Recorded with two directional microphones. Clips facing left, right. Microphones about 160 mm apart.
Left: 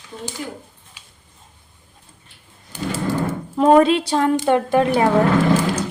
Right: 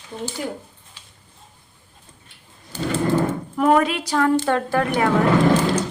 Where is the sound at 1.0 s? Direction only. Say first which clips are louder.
Left 1 dB; 10° left (ahead or behind).